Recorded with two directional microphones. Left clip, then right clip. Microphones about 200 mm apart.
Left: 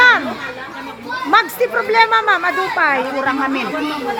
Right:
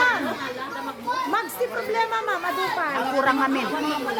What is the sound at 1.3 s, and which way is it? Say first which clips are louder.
Chatter: left 15 dB; 40° left (ahead or behind).